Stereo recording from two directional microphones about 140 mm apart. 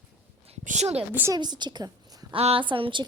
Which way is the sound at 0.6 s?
55° right (ahead or behind).